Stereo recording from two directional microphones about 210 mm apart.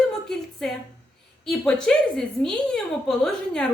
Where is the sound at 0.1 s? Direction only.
Centre (ahead or behind).